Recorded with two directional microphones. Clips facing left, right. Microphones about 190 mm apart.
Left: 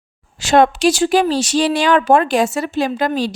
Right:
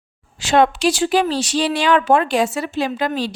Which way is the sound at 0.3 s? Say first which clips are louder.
Left 2 dB; 45° left (ahead or behind).